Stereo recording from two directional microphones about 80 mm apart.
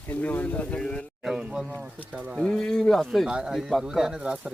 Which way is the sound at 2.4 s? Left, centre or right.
Centre.